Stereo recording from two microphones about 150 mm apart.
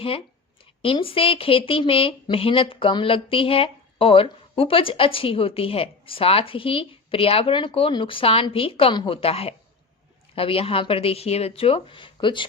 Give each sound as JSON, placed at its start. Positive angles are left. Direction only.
{"t": 0.8, "sound": "speech", "side_deg": 40}